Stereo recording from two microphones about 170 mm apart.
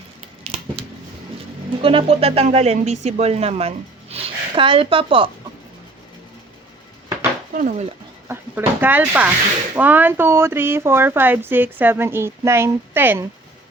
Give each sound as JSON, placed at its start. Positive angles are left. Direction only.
{"t": 0.4, "sound": "a sound", "side_deg": -35}
{"t": 1.8, "sound": "speech", "side_deg": -30}
{"t": 7.5, "sound": "speech", "side_deg": -45}
{"t": 8.3, "sound": "speech", "side_deg": -10}